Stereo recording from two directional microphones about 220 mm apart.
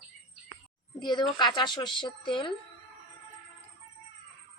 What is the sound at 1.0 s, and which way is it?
Speech, 20° left (ahead or behind).